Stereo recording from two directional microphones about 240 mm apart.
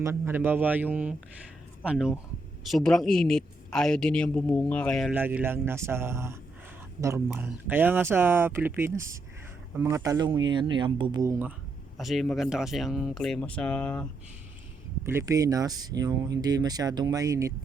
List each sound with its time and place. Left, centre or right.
0.0 s speech: centre
11.9 s speech: centre
15.0 s speech: centre